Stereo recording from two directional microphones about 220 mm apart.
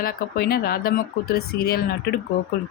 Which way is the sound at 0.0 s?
45° left (ahead or behind).